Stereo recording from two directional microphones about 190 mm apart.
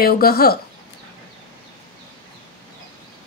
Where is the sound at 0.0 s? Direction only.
55° left (ahead or behind).